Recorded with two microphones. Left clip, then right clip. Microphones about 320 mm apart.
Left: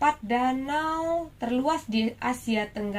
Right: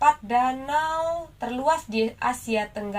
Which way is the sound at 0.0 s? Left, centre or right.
Right.